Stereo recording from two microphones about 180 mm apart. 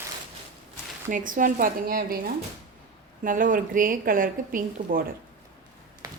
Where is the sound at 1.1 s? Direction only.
45° right (ahead or behind).